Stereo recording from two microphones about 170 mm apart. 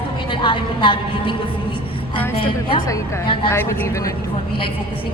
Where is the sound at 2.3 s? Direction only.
30° left (ahead or behind).